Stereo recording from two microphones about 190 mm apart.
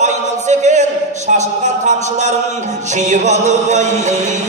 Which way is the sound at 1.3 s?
40° right (ahead or behind).